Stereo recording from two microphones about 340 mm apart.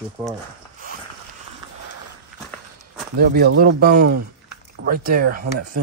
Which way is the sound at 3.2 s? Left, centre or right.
Right.